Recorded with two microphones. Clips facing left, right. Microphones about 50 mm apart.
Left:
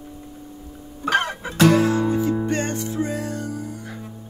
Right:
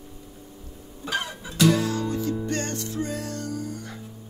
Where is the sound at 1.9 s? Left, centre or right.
Left; by 3.9 s centre.